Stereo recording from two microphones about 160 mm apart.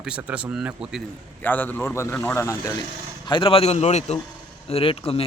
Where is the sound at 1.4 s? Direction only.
10° left (ahead or behind).